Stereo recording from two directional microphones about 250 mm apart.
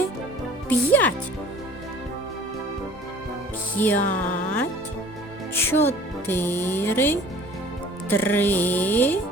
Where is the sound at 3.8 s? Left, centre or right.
Centre.